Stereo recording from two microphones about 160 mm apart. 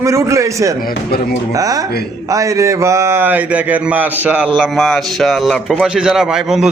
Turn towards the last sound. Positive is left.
turn(degrees=-5)  # may be behind; listen again after turning